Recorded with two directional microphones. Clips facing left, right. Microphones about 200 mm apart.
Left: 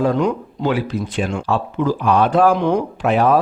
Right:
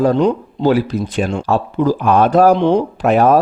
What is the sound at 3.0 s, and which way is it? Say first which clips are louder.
Speech: right 3 dB; 45° right (ahead or behind).